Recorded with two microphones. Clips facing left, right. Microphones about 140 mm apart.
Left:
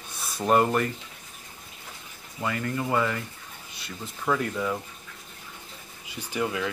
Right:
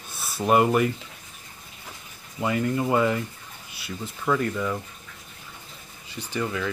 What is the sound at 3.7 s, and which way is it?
Speech, centre (ahead or behind).